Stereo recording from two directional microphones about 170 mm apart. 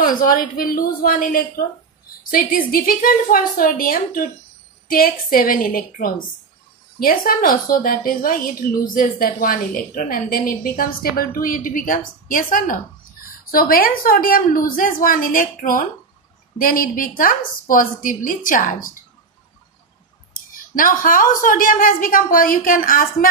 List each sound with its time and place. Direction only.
0.1 s a woman's voice: 55° left (ahead or behind)
2.7 s a woman's voice: 55° left (ahead or behind)
20.3 s a woman's voice: 55° left (ahead or behind)